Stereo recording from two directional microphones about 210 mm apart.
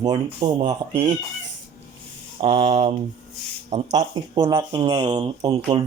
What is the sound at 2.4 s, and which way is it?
Speech, 25° right (ahead or behind).